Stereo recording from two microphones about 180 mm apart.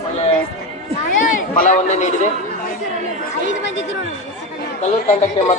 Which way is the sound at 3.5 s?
90° left.